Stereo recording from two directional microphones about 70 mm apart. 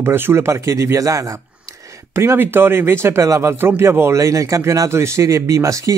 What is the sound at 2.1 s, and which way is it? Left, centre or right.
Speech, right.